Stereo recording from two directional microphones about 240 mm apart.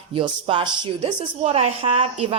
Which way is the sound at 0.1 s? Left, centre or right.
Right.